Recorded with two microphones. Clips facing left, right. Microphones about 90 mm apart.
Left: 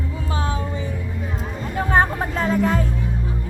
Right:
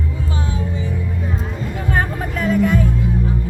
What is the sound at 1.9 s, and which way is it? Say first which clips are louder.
Vehicle: left 4 dB; 30° left (ahead or behind).